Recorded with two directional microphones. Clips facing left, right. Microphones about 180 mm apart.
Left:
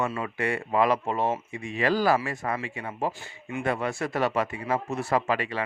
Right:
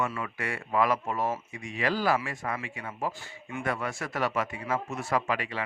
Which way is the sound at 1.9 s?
40° left (ahead or behind).